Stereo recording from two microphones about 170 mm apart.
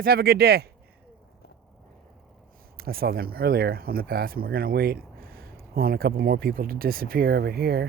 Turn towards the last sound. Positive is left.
turn(degrees=-65)  # may be behind; listen again after turning